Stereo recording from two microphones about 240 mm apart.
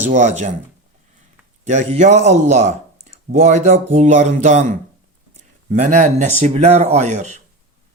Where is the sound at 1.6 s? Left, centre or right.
Right.